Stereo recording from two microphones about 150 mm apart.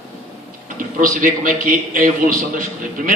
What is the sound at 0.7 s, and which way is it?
A man's voice, 65° right (ahead or behind).